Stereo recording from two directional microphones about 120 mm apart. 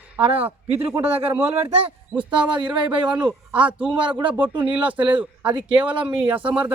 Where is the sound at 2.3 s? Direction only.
40° right (ahead or behind).